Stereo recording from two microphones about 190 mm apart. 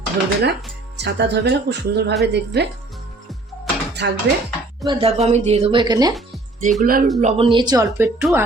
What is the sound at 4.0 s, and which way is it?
Speech, 65° right (ahead or behind).